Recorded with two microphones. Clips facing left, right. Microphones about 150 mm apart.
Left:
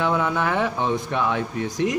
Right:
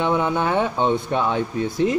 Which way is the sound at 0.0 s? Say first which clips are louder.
Right 2 dB; 20° right (ahead or behind).